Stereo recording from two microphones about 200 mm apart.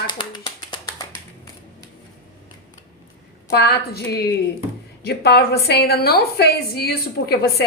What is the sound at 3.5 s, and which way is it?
A woman's voice, 55° left (ahead or behind).